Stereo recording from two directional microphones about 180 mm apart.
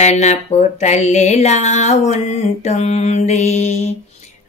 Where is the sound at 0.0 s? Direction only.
40° left (ahead or behind).